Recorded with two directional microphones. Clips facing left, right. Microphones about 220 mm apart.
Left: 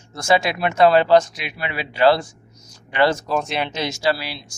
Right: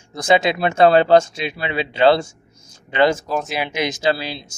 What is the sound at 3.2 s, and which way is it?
Speech, centre (ahead or behind).